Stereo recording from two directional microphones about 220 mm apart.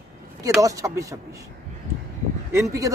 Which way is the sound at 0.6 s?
15° right (ahead or behind).